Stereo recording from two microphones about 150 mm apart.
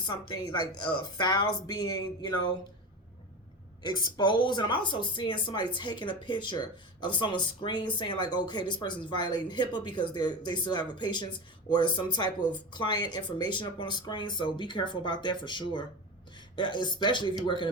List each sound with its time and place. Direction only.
0.0 s speech: 30° left (ahead or behind)
3.8 s speech: 30° left (ahead or behind)